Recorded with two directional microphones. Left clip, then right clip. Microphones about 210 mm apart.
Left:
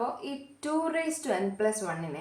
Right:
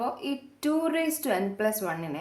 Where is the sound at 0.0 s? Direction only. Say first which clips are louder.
Right 2 dB; 40° right (ahead or behind).